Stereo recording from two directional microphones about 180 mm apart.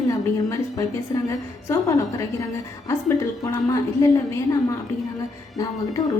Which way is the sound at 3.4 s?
20° left (ahead or behind).